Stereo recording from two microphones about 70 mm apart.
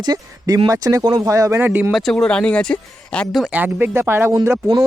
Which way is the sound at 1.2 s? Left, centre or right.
Right.